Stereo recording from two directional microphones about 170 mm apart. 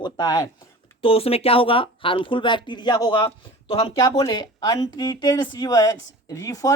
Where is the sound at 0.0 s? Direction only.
25° left (ahead or behind).